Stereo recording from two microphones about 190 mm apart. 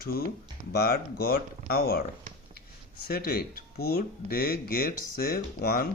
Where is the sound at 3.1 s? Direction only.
55° left (ahead or behind).